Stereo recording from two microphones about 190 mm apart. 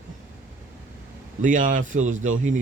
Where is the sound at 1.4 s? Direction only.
45° right (ahead or behind).